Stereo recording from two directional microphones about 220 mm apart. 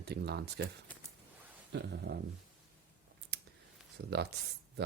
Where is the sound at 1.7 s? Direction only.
50° right (ahead or behind).